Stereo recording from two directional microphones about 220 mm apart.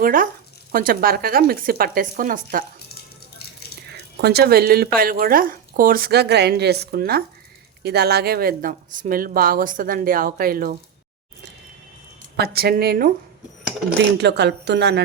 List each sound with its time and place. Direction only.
0.0 s speech: 40° right (ahead or behind)
3.3 s a sound: 45° left (ahead or behind)
3.8 s a woman's voice: 50° right (ahead or behind)
12.4 s a woman's voice: 45° right (ahead or behind)